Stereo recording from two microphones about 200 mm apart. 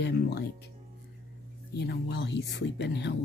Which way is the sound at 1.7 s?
55° left (ahead or behind).